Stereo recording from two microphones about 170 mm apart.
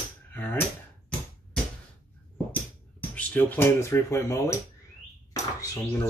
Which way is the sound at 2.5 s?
10° left (ahead or behind).